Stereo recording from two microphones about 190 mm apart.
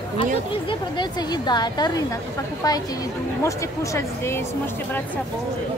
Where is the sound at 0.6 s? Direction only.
25° left (ahead or behind).